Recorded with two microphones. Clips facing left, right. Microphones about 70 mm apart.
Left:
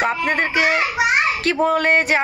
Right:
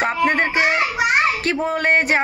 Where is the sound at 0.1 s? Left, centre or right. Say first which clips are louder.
Right 2 dB; right.